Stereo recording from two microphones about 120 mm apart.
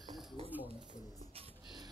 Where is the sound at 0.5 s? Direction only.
15° right (ahead or behind).